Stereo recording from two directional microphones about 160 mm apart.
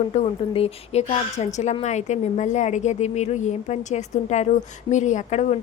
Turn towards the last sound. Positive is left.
turn(degrees=45)  # may be behind; listen again after turning